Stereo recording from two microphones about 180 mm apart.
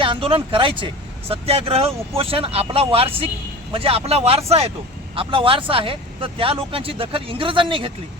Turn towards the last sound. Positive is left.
turn(degrees=-30)  # may be behind; listen again after turning